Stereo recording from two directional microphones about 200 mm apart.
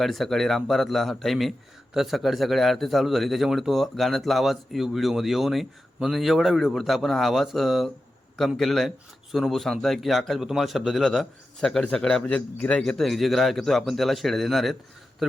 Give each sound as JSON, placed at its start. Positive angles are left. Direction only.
{"t": 0.0, "sound": "speech", "side_deg": 0}